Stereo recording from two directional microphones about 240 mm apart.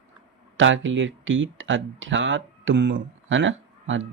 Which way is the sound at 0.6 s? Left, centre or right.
Right.